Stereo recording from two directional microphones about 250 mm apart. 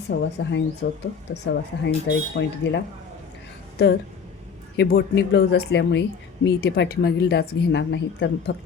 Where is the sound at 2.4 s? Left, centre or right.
Left.